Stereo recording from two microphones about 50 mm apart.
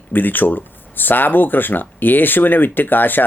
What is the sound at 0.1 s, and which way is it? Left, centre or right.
Speech, left.